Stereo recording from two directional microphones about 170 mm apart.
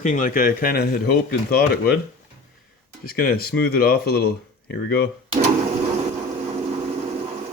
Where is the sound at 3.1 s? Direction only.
65° left (ahead or behind).